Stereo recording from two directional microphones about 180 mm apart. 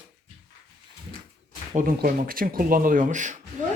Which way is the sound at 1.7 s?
55° right (ahead or behind).